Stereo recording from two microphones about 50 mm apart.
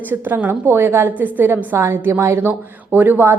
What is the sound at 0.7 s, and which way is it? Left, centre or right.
Speech, right.